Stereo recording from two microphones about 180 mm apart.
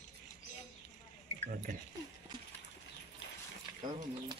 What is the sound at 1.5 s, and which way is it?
Speech, 50° right (ahead or behind).